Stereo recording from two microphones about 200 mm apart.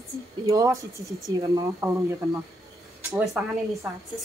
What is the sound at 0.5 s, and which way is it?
Speech, 15° right (ahead or behind).